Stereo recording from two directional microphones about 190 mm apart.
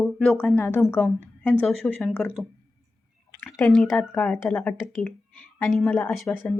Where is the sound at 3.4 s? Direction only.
15° left (ahead or behind).